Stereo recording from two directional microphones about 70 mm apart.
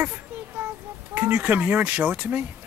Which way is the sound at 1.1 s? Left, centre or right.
Right.